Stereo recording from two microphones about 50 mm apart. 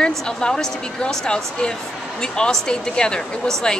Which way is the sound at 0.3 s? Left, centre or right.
Centre.